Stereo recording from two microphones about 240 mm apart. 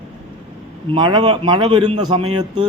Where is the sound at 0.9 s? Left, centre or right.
Centre.